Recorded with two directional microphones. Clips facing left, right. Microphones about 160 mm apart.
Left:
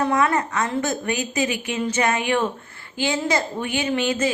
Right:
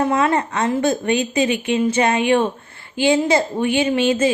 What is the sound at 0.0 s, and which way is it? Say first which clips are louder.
A woman's voice: right 3 dB; 25° right (ahead or behind).